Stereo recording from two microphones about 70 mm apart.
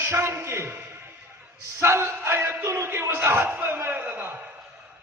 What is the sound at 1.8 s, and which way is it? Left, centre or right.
A man's voice, right.